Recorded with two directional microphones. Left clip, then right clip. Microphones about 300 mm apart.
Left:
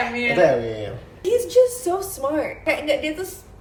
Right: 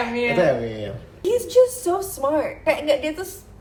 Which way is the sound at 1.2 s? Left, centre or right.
Centre.